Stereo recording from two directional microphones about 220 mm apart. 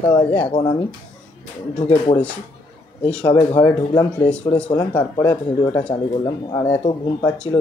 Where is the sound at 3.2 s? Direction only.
20° left (ahead or behind).